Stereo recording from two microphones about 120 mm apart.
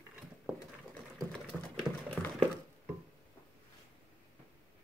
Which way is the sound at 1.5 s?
Centre (ahead or behind).